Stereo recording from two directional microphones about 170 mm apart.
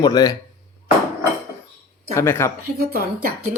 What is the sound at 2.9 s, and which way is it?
Speech, 65° right (ahead or behind).